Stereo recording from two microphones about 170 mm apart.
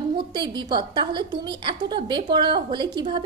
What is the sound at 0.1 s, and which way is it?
A woman's voice, 25° right (ahead or behind).